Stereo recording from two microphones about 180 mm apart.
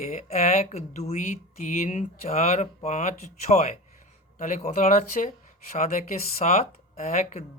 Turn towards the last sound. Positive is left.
turn(degrees=40)  # may be behind; listen again after turning